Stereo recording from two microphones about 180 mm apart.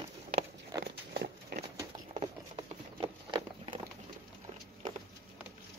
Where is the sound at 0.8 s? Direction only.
70° right (ahead or behind).